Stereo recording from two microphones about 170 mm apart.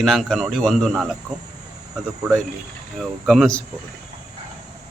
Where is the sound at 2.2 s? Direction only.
Centre (ahead or behind).